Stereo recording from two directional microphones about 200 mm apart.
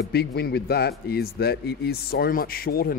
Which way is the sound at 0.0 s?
55° left (ahead or behind).